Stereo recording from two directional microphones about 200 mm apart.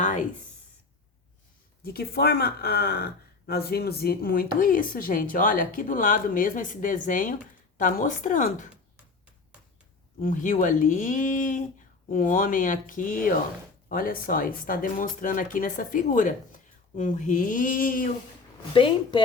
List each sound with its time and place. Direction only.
0.0 s a sound: 40° left (ahead or behind)
1.8 s speech: 50° left (ahead or behind)
10.2 s speech: 40° left (ahead or behind)
18.7 s a woman's voice: 25° left (ahead or behind)